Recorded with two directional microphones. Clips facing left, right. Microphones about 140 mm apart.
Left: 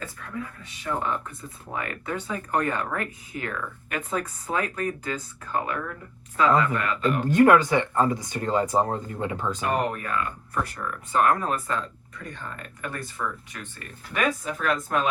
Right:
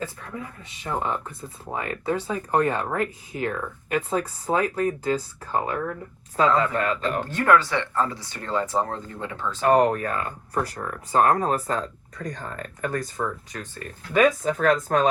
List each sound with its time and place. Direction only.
0.0 s speech: 25° right (ahead or behind)
7.3 s speech: 15° left (ahead or behind)
9.6 s speech: 40° right (ahead or behind)